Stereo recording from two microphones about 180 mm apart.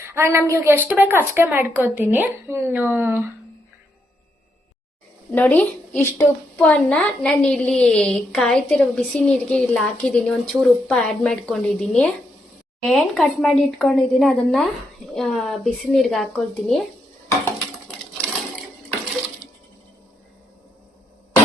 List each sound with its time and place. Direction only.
0.0 s a woman's voice: 15° right (ahead or behind)
5.3 s a woman's voice: 10° left (ahead or behind)